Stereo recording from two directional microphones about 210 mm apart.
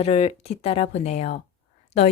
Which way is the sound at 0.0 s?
30° left (ahead or behind).